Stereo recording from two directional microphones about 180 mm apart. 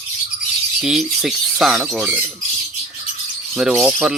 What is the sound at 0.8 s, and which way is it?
Speech, centre (ahead or behind).